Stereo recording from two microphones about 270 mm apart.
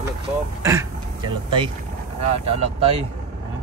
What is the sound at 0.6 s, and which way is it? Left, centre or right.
Speech, centre.